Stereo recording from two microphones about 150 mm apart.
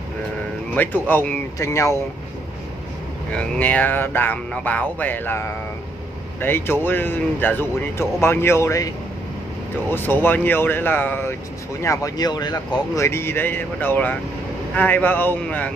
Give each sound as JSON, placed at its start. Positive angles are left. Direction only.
{"t": 0.7, "sound": "speech", "side_deg": 10}
{"t": 3.3, "sound": "speech", "side_deg": 10}